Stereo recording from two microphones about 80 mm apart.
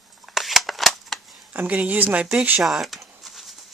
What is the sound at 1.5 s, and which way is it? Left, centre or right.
Speech, centre.